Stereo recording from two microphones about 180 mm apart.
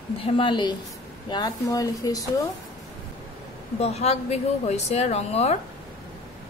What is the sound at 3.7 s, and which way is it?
Speech, 35° left (ahead or behind).